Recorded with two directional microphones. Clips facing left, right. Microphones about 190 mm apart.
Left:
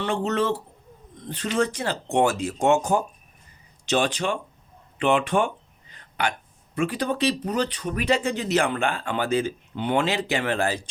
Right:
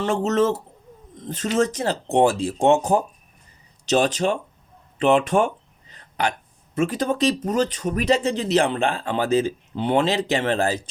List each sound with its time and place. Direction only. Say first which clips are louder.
0.0 s speech: right 4 dB; 40° right (ahead or behind)
5.9 s hiccup: right 3 dB; 35° right (ahead or behind)
6.7 s speech: right 3 dB; 40° right (ahead or behind)